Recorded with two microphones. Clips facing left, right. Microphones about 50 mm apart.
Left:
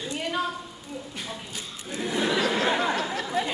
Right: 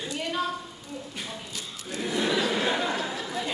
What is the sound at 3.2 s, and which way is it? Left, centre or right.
Chatter, left.